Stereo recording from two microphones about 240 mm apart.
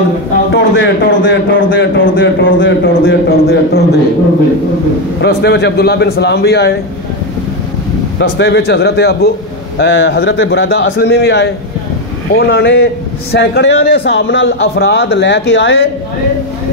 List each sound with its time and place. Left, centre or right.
0.5 s a man's voice: left
5.2 s speech: left
8.2 s a man's voice: left